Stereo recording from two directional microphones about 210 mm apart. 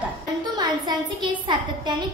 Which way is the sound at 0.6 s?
20° right (ahead or behind).